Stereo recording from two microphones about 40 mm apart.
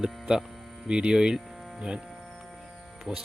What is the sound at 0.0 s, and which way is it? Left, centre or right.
Speech, centre.